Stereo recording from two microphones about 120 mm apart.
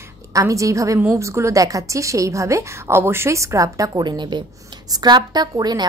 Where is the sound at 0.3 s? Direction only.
25° right (ahead or behind).